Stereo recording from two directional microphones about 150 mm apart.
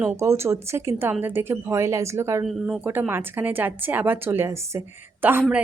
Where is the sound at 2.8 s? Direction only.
15° right (ahead or behind).